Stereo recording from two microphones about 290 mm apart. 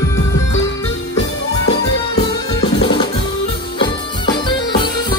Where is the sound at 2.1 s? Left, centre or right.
Centre.